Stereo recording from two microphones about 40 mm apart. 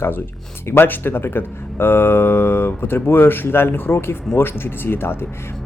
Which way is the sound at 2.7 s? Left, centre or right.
Left.